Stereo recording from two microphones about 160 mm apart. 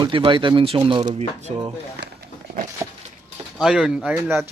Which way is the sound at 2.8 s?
15° right (ahead or behind).